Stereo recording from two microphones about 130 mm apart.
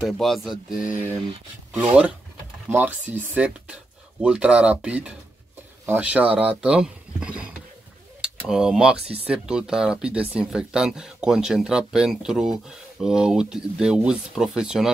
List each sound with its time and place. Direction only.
0.0 s speech: centre (ahead or behind)
0.7 s speech: 90° left
2.7 s speech: 15° right (ahead or behind)